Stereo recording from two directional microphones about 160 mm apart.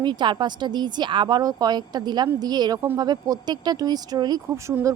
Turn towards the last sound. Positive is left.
turn(degrees=-25)  # may be behind; listen again after turning